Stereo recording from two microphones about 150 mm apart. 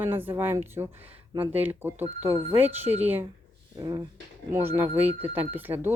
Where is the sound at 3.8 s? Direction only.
25° right (ahead or behind).